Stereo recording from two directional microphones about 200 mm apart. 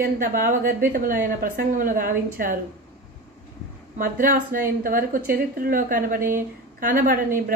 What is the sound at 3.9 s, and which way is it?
Speech, 45° right (ahead or behind).